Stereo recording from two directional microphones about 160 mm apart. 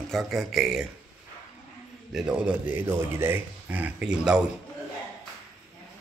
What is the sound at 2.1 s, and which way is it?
A man's voice, 5° right (ahead or behind).